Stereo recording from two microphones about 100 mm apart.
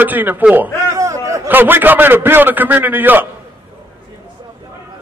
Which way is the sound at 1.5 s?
20° right (ahead or behind).